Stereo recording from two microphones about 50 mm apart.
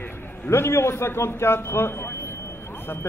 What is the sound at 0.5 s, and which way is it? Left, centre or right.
A man's voice, left.